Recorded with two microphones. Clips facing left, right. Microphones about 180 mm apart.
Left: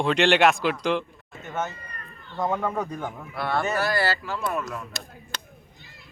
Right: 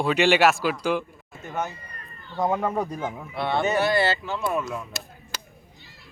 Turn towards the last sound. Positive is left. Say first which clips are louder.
# even
turn(degrees=-5)  # may be behind; listen again after turning